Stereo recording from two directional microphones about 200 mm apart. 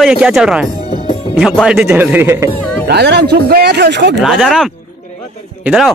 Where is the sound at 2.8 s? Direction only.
55° right (ahead or behind).